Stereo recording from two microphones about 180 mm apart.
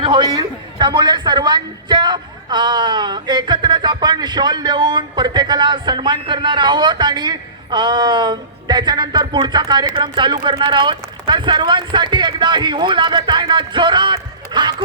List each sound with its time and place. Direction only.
0.0 s a man's voice: 25° right (ahead or behind)